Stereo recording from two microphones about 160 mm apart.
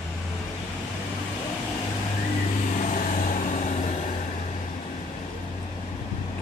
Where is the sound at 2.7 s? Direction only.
50° left (ahead or behind).